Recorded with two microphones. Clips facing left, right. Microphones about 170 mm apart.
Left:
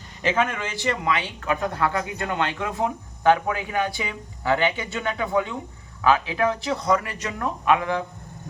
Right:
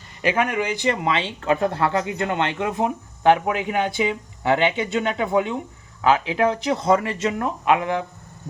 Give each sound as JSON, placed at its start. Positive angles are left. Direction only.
{"t": 0.2, "sound": "speech", "side_deg": -10}